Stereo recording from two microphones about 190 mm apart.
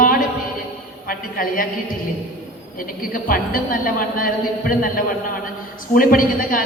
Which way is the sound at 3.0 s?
50° left (ahead or behind).